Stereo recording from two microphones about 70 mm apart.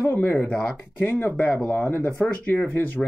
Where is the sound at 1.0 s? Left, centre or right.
Left.